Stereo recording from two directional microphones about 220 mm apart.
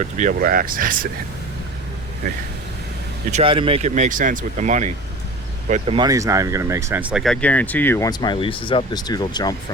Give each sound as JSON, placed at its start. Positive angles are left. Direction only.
{"t": 0.0, "sound": "speech", "side_deg": -35}
{"t": 3.3, "sound": "speech", "side_deg": -25}